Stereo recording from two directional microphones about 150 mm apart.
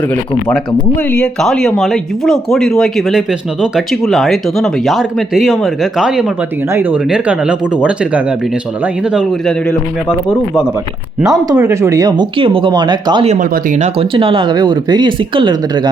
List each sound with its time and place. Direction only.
1.1 s speech: 5° left (ahead or behind)
11.2 s speech: 25° right (ahead or behind)
13.2 s speech: 50° right (ahead or behind); by 15.9 s 30° right (ahead or behind)